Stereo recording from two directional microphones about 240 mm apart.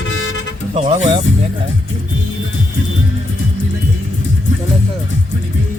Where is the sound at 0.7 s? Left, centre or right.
Right.